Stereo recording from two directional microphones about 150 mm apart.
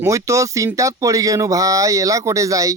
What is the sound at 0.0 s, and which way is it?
Speech, 20° right (ahead or behind).